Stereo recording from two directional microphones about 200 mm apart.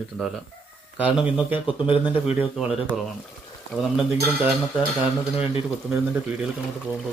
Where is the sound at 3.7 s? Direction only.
5° right (ahead or behind).